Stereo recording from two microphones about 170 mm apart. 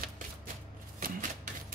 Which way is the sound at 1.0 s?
55° right (ahead or behind).